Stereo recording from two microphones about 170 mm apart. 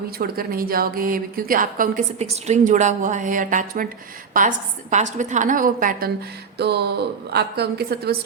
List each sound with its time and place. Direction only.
0.2 s a woman's voice: 60° right (ahead or behind)
6.6 s a woman's voice: 75° right (ahead or behind)